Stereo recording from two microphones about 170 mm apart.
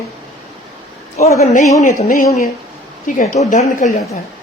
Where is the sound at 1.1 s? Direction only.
40° left (ahead or behind).